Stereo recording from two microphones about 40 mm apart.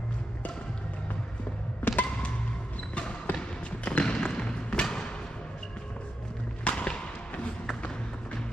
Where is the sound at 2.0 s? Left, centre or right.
Left.